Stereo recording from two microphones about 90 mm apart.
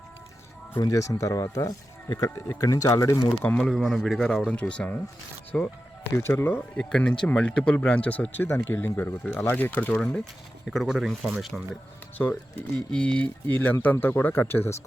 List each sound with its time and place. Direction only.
0.8 s speech: 40° left (ahead or behind)
3.6 s speech: centre (ahead or behind)
6.1 s speech: 25° left (ahead or behind)
6.6 s speech: 10° left (ahead or behind)
10.7 s speech: 5° right (ahead or behind)
12.1 s speech: 20° left (ahead or behind)